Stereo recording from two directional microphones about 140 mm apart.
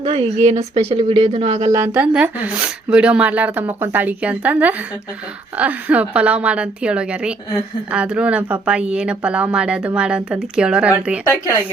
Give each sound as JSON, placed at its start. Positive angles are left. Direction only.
{"t": 0.0, "sound": "speech", "side_deg": -45}
{"t": 1.7, "sound": "a woman's voice", "side_deg": -15}